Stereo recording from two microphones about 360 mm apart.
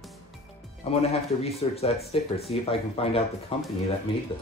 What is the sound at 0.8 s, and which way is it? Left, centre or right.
Speech, centre.